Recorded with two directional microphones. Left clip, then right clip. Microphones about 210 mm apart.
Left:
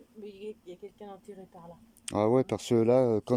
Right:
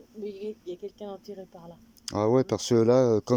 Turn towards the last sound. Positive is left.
turn(degrees=10)  # may be behind; listen again after turning